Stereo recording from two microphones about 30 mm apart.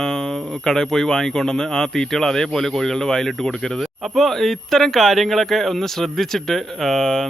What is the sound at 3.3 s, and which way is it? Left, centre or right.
Speech, centre.